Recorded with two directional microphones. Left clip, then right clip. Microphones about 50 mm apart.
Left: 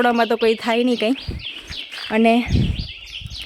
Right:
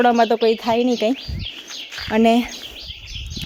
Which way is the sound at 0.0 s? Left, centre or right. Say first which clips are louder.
Right 2 dB; right.